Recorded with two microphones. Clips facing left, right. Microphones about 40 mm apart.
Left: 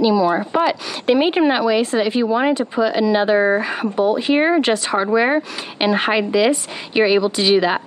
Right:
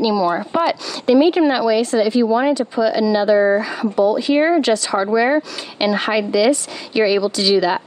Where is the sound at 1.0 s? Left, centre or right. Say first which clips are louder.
Right 3 dB; left.